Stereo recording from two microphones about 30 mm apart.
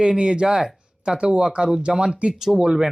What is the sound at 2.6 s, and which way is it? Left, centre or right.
Speech, centre.